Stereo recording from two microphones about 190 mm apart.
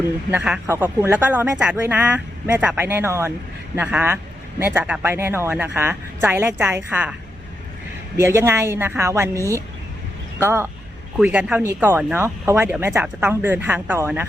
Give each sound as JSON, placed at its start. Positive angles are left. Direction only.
{"t": 0.3, "sound": "speech", "side_deg": -5}
{"t": 8.1, "sound": "speech", "side_deg": -15}
{"t": 9.3, "sound": "speech", "side_deg": 15}
{"t": 10.4, "sound": "speech", "side_deg": -15}